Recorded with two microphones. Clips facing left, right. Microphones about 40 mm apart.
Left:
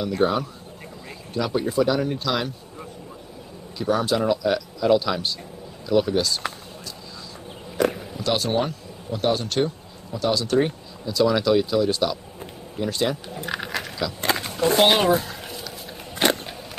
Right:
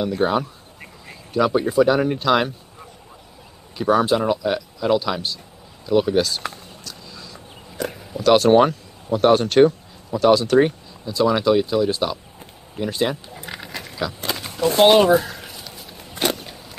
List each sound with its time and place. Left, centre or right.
0.1 s speech: centre
3.7 s a man's voice: centre
6.4 s a sound: centre
7.7 s a sound: centre
8.4 s speech: right
10.1 s speech: centre
14.3 s speech: centre
15.2 s a sound: centre
16.2 s biting: centre